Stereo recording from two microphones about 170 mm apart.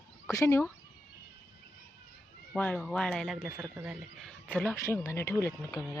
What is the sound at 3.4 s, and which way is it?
Speech, 10° right (ahead or behind).